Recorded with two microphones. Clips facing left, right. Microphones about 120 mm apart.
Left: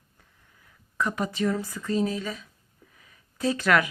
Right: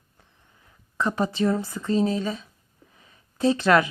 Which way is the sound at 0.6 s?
30° right (ahead or behind).